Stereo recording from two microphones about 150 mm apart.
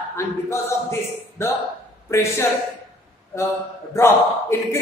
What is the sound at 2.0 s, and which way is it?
A man's voice, 20° left (ahead or behind).